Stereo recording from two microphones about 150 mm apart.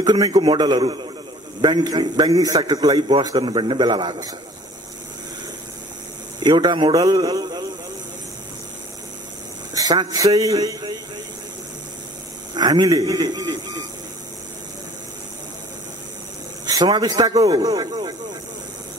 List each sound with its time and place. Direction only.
0.0 s a man's voice: 30° right (ahead or behind)
6.4 s a man's voice: 30° right (ahead or behind)
9.8 s a man's voice: 25° right (ahead or behind)
12.5 s a man's voice: 25° right (ahead or behind)
16.6 s speech: 30° right (ahead or behind)